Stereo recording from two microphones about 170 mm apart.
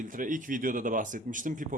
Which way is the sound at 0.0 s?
50° right (ahead or behind).